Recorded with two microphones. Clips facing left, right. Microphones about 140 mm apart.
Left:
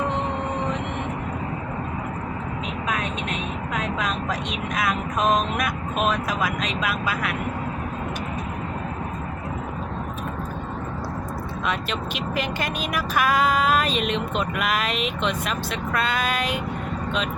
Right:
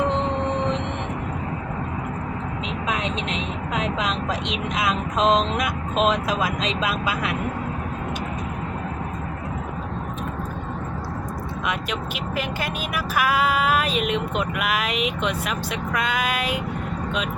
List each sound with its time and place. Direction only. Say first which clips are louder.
2.9 s vehicle: right 2 dB; 25° right (ahead or behind)
3.8 s speech: right 2 dB; 25° right (ahead or behind)
11.6 s speech: left 1 dB; 10° right (ahead or behind)